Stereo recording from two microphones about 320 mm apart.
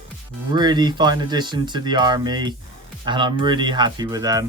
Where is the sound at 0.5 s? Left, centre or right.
Centre.